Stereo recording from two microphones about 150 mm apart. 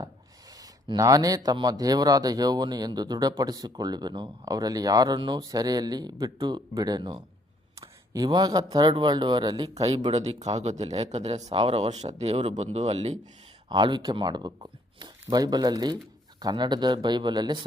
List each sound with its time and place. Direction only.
0.5 s speech: 25° right (ahead or behind)
9.7 s speech: 45° right (ahead or behind)
13.7 s speech: 30° right (ahead or behind)